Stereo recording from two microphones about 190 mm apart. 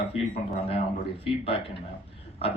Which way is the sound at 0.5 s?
30° left (ahead or behind).